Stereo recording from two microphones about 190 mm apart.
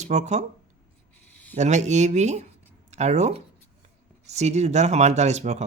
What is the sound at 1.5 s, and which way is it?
Speech, 35° right (ahead or behind).